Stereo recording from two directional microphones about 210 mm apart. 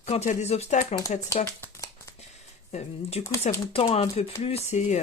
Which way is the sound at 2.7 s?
30° left (ahead or behind).